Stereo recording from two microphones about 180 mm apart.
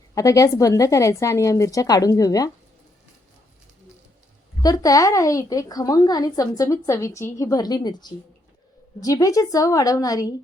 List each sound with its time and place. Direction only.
0.1 s speech: 20° left (ahead or behind)
4.6 s a woman's voice: 20° left (ahead or behind)